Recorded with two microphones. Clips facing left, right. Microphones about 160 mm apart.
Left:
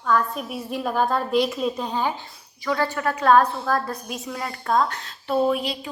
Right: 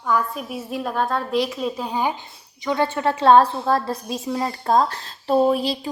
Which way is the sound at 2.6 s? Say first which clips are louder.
Right 3 dB; 20° right (ahead or behind).